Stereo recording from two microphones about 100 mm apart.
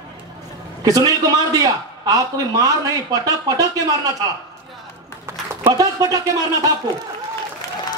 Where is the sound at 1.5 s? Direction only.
40° right (ahead or behind).